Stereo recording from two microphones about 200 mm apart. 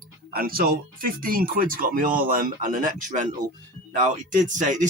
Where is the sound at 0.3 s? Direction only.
45° right (ahead or behind).